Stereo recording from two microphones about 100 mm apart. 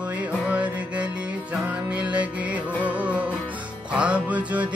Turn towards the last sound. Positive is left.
turn(degrees=-15)  # may be behind; listen again after turning